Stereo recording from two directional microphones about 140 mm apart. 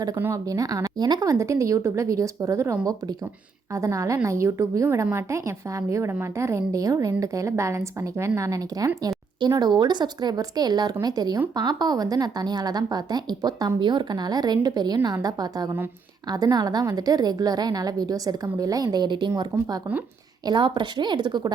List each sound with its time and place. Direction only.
0.2 s a woman's voice: 20° right (ahead or behind)
3.8 s a woman's voice: 20° right (ahead or behind)
19.5 s speech: 15° right (ahead or behind)
20.5 s speech: 35° right (ahead or behind)